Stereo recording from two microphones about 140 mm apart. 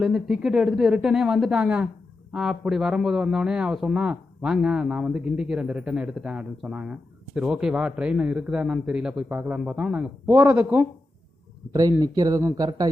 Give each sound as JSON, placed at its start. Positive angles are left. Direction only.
{"t": 0.0, "sound": "a man's voice", "side_deg": -5}
{"t": 11.7, "sound": "speech", "side_deg": -25}